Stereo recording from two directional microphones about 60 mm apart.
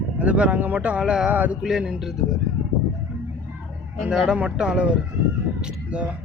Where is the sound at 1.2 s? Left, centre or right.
Right.